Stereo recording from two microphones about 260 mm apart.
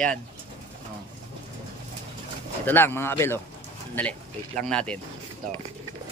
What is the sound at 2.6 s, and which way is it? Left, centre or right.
A man's voice, centre.